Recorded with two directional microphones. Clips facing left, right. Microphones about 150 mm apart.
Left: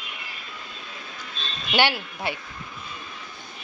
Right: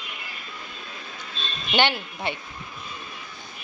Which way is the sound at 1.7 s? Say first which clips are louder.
Even; 10° left (ahead or behind).